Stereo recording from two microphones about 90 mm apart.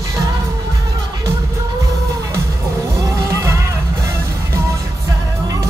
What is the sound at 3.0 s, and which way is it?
Music, 35° right (ahead or behind).